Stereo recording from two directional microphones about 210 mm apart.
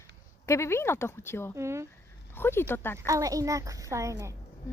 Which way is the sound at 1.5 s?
15° right (ahead or behind).